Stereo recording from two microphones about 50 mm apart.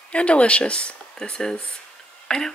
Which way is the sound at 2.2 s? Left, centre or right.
Centre.